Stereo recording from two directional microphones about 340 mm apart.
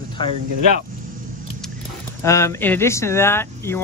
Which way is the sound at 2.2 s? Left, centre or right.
Centre.